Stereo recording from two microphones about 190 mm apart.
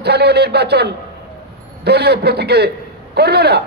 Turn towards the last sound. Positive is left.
turn(degrees=-60)  # may be behind; listen again after turning